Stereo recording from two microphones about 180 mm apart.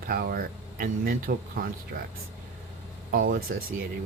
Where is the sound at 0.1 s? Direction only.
55° right (ahead or behind).